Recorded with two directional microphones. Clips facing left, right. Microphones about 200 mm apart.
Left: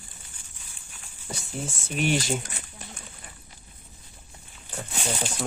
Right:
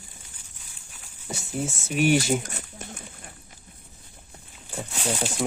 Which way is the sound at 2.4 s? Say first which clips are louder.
Right 4 dB; 45° right (ahead or behind).